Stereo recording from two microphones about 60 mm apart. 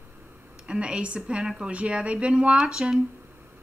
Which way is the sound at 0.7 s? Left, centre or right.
Centre.